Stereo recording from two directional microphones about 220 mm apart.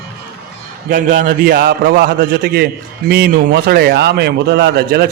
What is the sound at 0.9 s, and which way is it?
A man's voice, 35° right (ahead or behind).